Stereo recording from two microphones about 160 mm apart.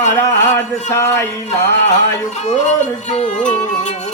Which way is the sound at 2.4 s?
45° left (ahead or behind).